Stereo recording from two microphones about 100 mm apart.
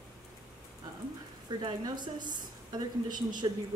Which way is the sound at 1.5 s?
45° right (ahead or behind).